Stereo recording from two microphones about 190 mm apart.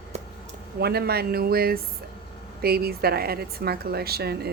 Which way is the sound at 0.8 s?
55° right (ahead or behind).